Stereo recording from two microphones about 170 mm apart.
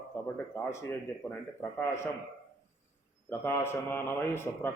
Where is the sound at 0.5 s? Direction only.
15° left (ahead or behind).